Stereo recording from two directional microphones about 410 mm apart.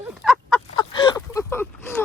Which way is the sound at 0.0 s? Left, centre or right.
Centre.